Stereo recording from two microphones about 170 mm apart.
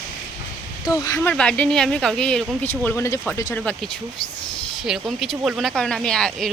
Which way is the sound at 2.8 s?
15° left (ahead or behind).